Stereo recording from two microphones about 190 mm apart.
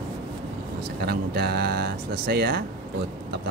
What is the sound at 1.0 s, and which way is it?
Speech, 55° right (ahead or behind).